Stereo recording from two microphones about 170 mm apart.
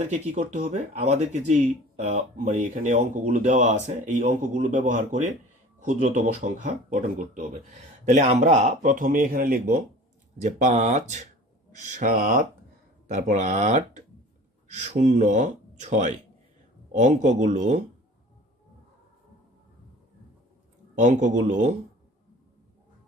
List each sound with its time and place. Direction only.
0.0 s speech: 45° right (ahead or behind)
10.4 s speech: 45° right (ahead or behind)
13.1 s speech: 45° right (ahead or behind)
20.9 s speech: 45° right (ahead or behind)